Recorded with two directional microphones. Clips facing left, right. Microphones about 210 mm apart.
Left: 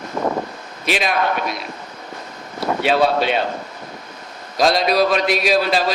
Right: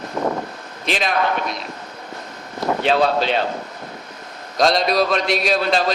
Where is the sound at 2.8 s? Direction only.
10° left (ahead or behind).